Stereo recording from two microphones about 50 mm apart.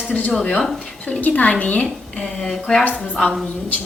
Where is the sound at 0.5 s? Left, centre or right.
Centre.